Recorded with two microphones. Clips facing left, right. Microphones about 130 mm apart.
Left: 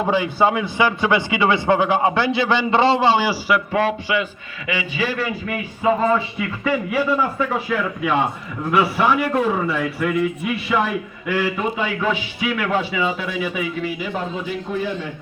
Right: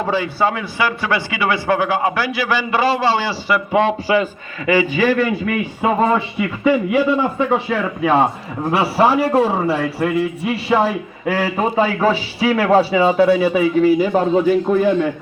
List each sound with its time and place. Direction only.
0.1 s a man's voice: 15° left (ahead or behind)
3.7 s a man's voice: 25° right (ahead or behind)
4.1 s a man's voice: 40° right (ahead or behind)
5.8 s speech: 70° right (ahead or behind)
6.9 s a man's voice: 25° right (ahead or behind); by 15.1 s 50° right (ahead or behind)